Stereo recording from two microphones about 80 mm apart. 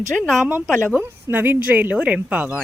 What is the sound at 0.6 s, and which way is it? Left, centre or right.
Speech, centre.